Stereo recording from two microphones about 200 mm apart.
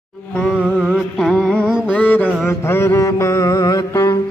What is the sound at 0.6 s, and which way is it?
Music, 5° right (ahead or behind).